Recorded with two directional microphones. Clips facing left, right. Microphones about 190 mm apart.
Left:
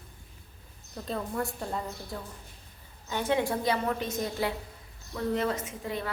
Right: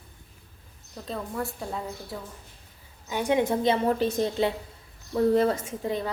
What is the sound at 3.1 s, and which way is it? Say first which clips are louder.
A woman's voice: right 4 dB; 15° right (ahead or behind).